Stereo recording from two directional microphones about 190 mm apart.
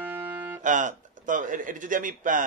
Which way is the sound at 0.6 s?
40° right (ahead or behind).